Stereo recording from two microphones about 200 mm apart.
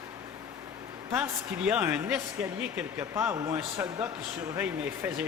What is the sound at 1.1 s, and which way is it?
A man's voice, 10° right (ahead or behind).